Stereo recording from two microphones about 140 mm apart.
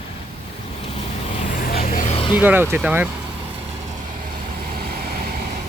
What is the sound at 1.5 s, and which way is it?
Vehicle, 90° left.